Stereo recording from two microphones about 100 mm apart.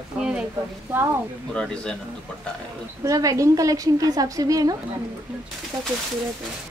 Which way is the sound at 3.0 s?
35° right (ahead or behind).